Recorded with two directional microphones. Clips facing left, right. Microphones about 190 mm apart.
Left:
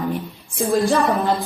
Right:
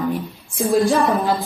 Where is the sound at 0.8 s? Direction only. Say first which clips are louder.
Right 1 dB; centre (ahead or behind).